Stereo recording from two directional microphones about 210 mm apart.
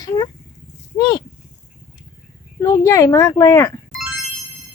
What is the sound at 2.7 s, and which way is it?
Speech, 15° left (ahead or behind).